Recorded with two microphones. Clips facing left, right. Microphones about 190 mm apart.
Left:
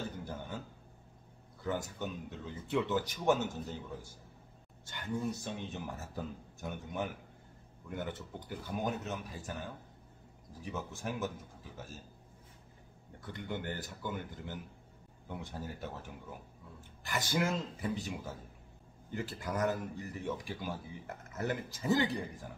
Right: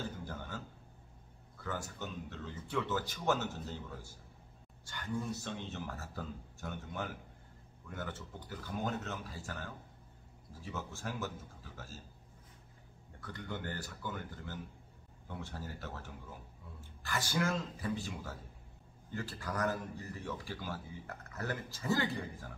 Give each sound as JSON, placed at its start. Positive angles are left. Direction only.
{"t": 0.2, "sound": "a sound", "side_deg": 20}
{"t": 1.6, "sound": "speech", "side_deg": 20}
{"t": 13.2, "sound": "speech", "side_deg": 20}